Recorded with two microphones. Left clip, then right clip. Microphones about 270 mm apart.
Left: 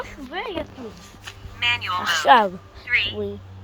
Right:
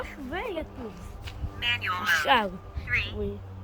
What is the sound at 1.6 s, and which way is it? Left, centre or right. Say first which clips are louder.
Speech: left 6 dB; centre.